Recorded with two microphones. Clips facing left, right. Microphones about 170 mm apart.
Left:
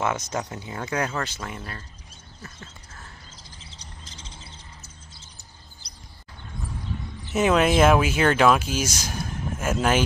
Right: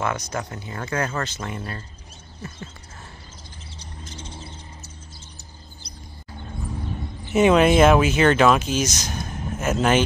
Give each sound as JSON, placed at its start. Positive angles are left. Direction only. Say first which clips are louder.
{"t": 0.0, "sound": "speech", "louder": "even", "side_deg": 20}
{"t": 3.7, "sound": "a sound", "louder": "right 9 dB", "side_deg": -55}
{"t": 7.3, "sound": "speech", "louder": "right 4 dB", "side_deg": 0}